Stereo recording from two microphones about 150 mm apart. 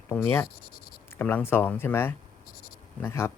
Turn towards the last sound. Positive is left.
turn(degrees=15)  # may be behind; listen again after turning